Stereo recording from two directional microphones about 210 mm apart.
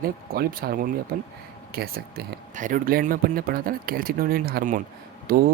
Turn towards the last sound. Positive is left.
turn(degrees=-45)  # may be behind; listen again after turning